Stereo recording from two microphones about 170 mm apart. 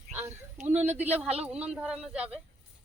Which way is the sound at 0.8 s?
40° right (ahead or behind).